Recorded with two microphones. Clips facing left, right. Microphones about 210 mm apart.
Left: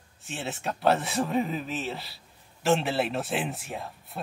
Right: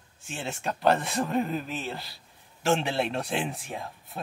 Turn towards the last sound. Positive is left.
turn(degrees=0)  # may be behind; listen again after turning